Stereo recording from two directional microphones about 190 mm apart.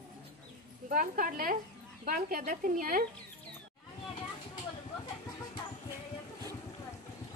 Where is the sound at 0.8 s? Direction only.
45° right (ahead or behind).